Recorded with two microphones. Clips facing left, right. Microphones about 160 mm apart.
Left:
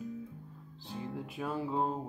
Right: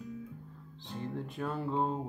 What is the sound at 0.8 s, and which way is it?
Speech, 5° left (ahead or behind).